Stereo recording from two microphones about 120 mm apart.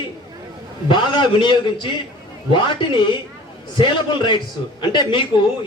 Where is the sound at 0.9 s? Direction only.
40° left (ahead or behind).